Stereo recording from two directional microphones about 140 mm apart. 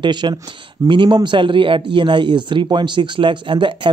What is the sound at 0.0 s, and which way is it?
A man's voice, 30° right (ahead or behind).